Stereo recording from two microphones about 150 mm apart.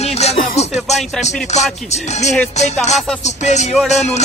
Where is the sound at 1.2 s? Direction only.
50° left (ahead or behind).